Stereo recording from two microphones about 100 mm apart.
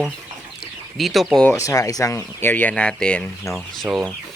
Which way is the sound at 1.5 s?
35° left (ahead or behind).